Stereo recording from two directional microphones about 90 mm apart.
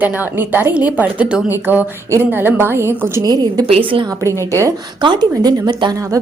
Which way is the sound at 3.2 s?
45° right (ahead or behind).